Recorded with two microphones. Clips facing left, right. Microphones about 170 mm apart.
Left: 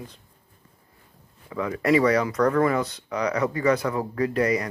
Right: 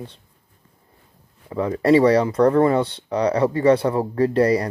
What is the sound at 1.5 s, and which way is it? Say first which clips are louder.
Speech: right 5 dB; 30° right (ahead or behind).